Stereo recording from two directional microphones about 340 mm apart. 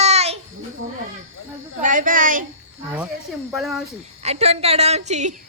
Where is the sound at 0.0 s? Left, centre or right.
Centre.